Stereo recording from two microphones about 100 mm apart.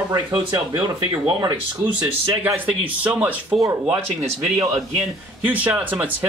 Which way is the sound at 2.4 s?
20° right (ahead or behind).